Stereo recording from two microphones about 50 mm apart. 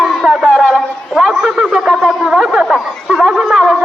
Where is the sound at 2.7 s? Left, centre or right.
Centre.